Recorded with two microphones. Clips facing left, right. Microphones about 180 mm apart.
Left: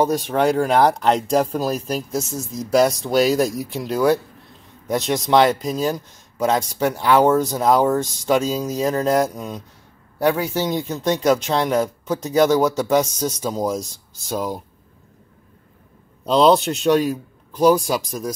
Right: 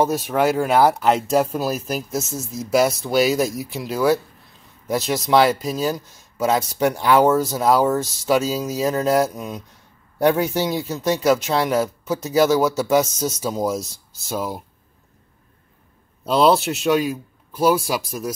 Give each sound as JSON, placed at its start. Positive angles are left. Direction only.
{"t": 0.0, "sound": "speech", "side_deg": -5}
{"t": 10.1, "sound": "speech", "side_deg": -20}
{"t": 16.3, "sound": "speech", "side_deg": -5}